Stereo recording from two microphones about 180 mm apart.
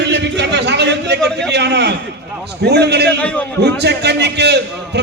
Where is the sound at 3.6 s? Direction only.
65° right (ahead or behind).